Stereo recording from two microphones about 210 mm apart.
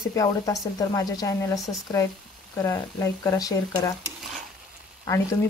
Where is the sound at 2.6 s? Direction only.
10° left (ahead or behind).